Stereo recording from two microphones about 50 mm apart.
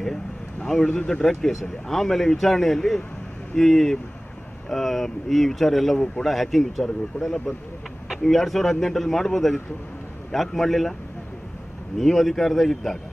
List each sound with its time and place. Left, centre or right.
0.6 s speech: centre
1.5 s speech: centre
12.0 s speech: centre